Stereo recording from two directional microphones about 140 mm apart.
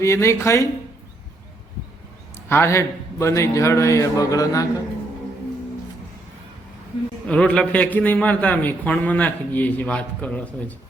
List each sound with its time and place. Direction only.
0.0 s a man's voice: 20° left (ahead or behind)
2.3 s a man's voice: 15° left (ahead or behind)
7.3 s a man's voice: 5° left (ahead or behind)